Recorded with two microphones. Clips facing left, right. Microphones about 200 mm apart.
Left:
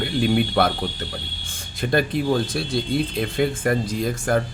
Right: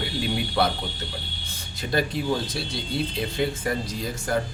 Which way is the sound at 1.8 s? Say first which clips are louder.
Left 4 dB; 55° left (ahead or behind).